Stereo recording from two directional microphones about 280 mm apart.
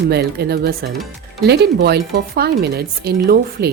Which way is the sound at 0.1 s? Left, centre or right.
Right.